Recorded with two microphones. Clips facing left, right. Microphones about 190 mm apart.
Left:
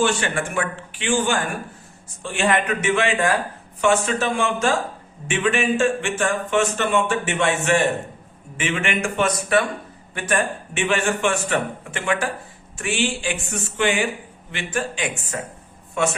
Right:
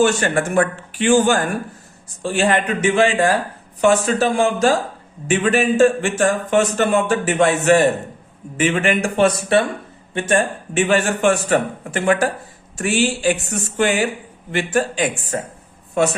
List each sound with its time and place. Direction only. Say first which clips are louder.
0.0 s speech: right 5 dB; 45° right (ahead or behind)